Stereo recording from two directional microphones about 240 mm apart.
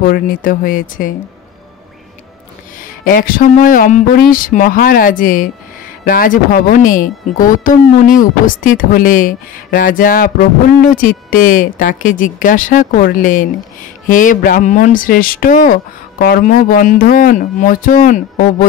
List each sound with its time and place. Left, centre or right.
0.0 s speech: left
2.8 s speech: left